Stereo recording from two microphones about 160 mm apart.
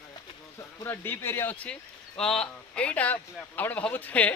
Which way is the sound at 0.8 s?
15° left (ahead or behind).